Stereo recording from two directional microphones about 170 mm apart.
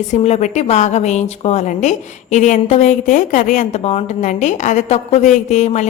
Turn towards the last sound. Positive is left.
turn(degrees=45)  # may be behind; listen again after turning